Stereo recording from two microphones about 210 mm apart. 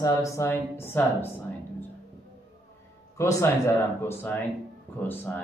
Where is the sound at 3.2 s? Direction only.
15° left (ahead or behind).